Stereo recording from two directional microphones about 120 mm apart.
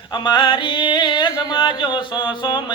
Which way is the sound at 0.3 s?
40° left (ahead or behind).